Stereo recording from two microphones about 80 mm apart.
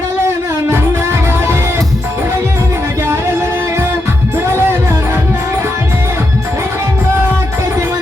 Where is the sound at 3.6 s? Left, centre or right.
Right.